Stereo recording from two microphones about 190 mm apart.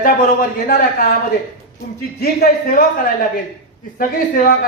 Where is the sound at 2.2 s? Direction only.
55° left (ahead or behind).